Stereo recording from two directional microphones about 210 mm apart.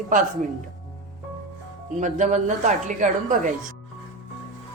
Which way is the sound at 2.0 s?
35° right (ahead or behind).